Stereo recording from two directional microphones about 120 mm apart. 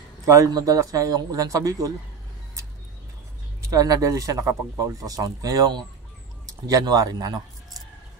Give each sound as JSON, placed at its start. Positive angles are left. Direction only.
{"t": 0.2, "sound": "a man's voice", "side_deg": -25}
{"t": 3.6, "sound": "a man's voice", "side_deg": -30}